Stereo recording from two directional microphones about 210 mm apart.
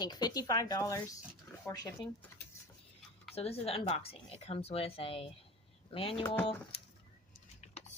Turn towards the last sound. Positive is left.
turn(degrees=30)  # may be behind; listen again after turning